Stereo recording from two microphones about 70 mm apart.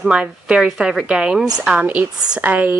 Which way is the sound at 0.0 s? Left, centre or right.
Centre.